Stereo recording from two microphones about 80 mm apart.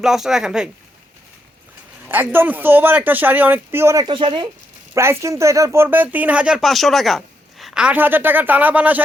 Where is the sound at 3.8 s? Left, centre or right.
Right.